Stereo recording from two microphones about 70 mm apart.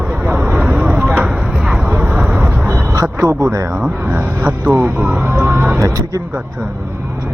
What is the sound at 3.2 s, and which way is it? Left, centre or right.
Speech, right.